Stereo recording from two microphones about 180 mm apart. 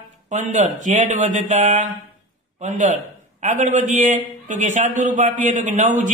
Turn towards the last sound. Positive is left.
turn(degrees=-45)  # may be behind; listen again after turning